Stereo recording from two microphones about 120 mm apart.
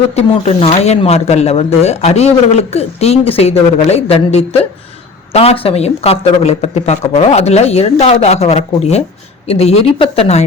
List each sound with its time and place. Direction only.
0.1 s speech: 60° left (ahead or behind)